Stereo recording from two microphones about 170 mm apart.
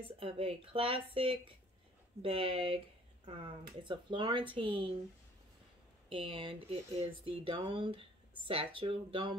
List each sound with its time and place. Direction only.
0.0 s speech: 35° right (ahead or behind)
6.0 s speech: 30° right (ahead or behind)